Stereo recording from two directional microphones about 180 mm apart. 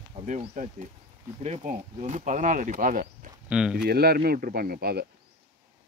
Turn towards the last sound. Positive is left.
turn(degrees=-60)  # may be behind; listen again after turning